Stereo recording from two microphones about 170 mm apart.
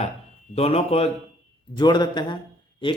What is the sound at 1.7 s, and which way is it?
A man's voice, 25° left (ahead or behind).